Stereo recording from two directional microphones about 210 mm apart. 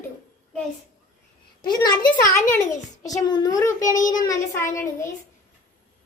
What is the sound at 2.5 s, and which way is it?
A child's voice, 15° left (ahead or behind).